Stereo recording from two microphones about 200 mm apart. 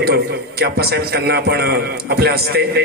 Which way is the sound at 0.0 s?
50° right (ahead or behind).